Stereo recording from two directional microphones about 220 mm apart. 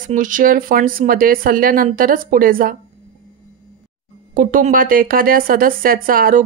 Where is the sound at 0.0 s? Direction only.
35° right (ahead or behind).